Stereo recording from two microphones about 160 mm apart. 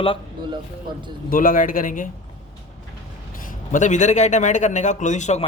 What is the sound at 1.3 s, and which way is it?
Speech, 60° left (ahead or behind).